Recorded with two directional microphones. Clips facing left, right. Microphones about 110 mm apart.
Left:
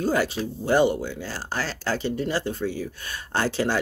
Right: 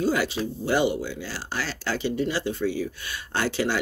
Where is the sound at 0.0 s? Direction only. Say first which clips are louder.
Left 1 dB; 45° left (ahead or behind).